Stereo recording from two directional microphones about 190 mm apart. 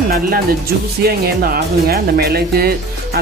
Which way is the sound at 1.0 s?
50° right (ahead or behind).